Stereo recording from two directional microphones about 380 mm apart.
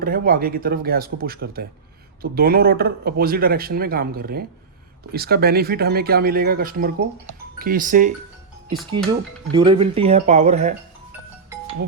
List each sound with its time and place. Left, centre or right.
0.0 s speech: right
9.5 s speech: centre
11.4 s music: centre